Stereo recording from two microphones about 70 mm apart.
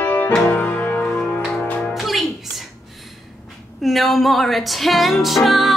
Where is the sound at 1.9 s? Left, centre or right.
Centre.